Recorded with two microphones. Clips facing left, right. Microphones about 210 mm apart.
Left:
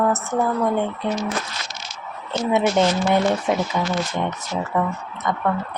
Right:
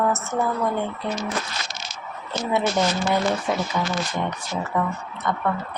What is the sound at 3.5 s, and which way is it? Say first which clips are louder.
Speech: left 4 dB; 20° left (ahead or behind).